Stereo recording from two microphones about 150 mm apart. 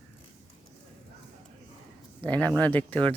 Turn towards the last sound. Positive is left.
turn(degrees=10)  # may be behind; listen again after turning